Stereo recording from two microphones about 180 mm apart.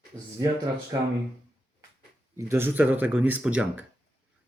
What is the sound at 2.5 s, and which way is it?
Speech, 10° right (ahead or behind).